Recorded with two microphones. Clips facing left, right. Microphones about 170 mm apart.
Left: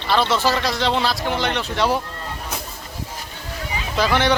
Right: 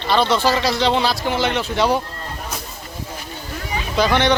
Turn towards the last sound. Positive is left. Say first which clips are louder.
# right 2 dB
turn(degrees=5)  # may be behind; listen again after turning